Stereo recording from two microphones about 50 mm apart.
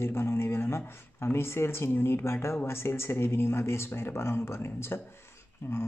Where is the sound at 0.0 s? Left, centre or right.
Left.